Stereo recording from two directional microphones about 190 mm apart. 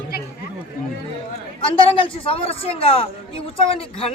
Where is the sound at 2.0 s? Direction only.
30° left (ahead or behind).